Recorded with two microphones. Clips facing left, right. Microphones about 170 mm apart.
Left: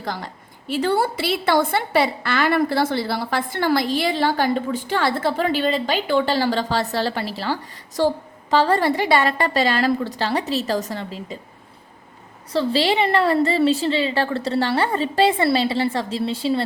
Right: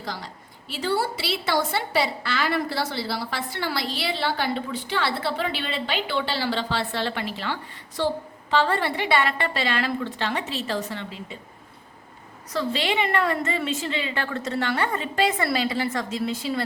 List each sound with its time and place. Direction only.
0.0 s a woman's voice: 50° left (ahead or behind)
12.5 s a woman's voice: 30° left (ahead or behind)